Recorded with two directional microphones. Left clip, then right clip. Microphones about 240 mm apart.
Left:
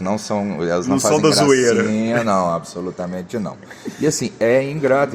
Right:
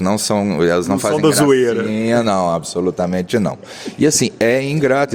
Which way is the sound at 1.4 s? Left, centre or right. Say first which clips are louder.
Right 1 dB; right.